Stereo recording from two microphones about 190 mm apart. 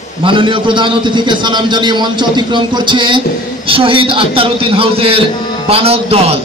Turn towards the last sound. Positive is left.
turn(degrees=-30)  # may be behind; listen again after turning